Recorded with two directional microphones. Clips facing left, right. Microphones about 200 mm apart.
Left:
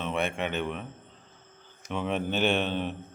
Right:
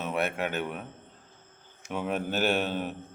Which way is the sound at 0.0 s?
5° right (ahead or behind).